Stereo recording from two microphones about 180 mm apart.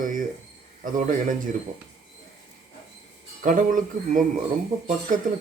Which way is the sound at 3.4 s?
45° right (ahead or behind).